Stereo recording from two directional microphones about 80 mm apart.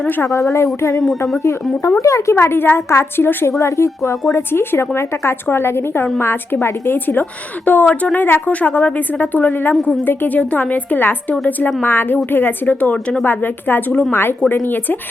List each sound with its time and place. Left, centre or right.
0.2 s a woman's voice: left